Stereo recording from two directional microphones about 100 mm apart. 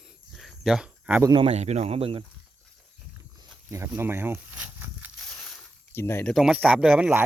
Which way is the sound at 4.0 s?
20° right (ahead or behind).